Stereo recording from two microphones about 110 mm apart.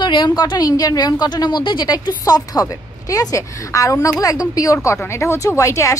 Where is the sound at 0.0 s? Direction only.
45° left (ahead or behind).